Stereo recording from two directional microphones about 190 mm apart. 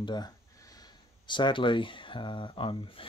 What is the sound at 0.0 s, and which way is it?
Speech, 20° left (ahead or behind).